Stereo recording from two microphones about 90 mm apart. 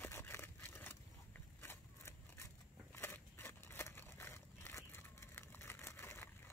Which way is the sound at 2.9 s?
25° left (ahead or behind).